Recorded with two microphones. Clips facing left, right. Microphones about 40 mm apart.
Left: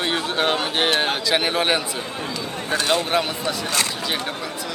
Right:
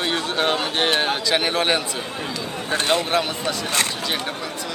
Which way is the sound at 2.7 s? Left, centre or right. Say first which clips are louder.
Even; right.